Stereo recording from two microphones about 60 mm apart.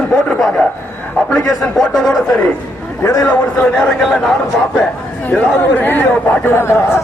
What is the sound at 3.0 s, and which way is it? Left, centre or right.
Speech, left.